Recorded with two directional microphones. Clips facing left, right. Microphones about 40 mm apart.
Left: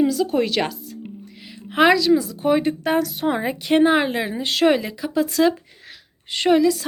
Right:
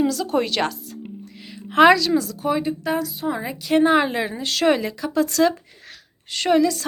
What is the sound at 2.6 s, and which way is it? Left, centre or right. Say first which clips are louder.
Speech: left 3 dB; left.